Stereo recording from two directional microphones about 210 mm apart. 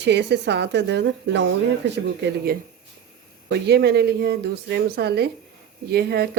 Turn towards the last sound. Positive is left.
turn(degrees=-50)  # may be behind; listen again after turning